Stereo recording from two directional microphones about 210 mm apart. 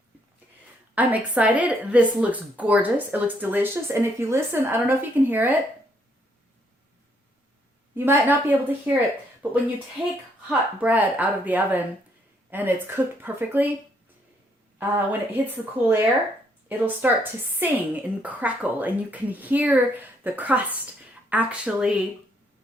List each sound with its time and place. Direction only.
0.9 s speech: 5° right (ahead or behind)
7.9 s speech: 10° right (ahead or behind)
14.8 s a woman's voice: 10° right (ahead or behind)